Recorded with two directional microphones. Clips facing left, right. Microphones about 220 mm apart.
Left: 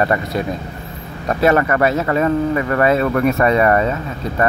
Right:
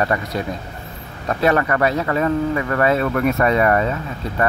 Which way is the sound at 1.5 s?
20° left (ahead or behind).